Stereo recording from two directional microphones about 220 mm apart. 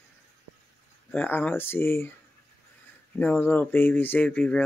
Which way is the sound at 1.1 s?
10° left (ahead or behind).